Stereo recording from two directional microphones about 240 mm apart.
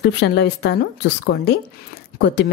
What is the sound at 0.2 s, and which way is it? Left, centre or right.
Speech, left.